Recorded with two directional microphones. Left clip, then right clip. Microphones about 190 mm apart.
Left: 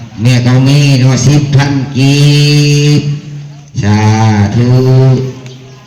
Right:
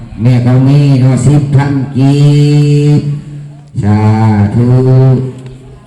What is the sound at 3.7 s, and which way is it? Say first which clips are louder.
Mantra: left 1 dB; 60° right (ahead or behind).